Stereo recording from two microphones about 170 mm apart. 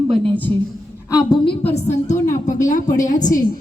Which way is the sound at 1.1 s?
30° left (ahead or behind).